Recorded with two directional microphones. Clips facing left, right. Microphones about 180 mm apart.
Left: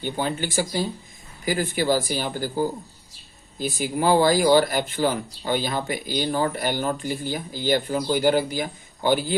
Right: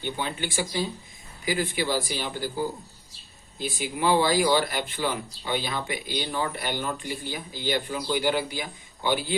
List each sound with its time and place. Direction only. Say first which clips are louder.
0.0 s speech: left 4 dB; 45° left (ahead or behind)